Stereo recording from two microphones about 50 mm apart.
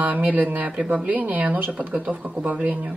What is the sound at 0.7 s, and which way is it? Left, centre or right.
Speech, right.